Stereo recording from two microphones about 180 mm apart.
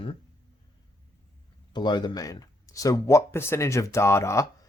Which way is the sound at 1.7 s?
25° left (ahead or behind).